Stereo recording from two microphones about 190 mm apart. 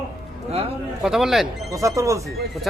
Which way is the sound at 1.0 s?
Centre (ahead or behind).